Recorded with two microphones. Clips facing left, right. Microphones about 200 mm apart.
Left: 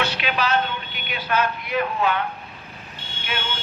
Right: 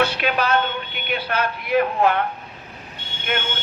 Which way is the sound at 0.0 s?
50° right (ahead or behind).